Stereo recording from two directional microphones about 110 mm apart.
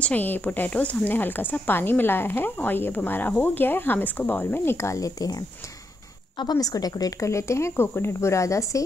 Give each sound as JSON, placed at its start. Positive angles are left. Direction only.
{"t": 0.0, "sound": "speech", "side_deg": 15}
{"t": 6.5, "sound": "speech", "side_deg": 35}